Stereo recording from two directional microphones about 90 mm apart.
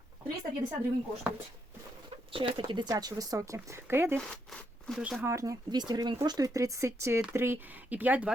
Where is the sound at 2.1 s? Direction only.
75° right (ahead or behind); by 2.9 s 55° right (ahead or behind).